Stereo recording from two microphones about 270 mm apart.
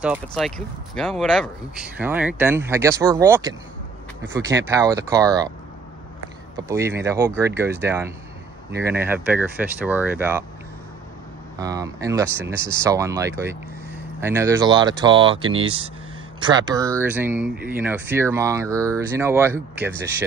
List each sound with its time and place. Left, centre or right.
0.0 s speech: centre
6.7 s speech: centre
11.5 s speech: centre